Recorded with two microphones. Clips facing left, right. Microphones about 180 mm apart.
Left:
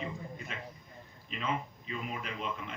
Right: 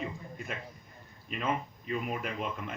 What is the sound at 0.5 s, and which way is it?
A man's voice, 50° right (ahead or behind).